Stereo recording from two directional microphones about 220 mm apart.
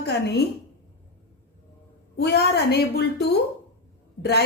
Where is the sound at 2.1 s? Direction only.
45° left (ahead or behind).